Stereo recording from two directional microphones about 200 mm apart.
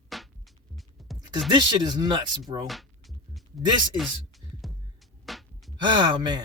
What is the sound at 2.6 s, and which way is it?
Music, centre (ahead or behind).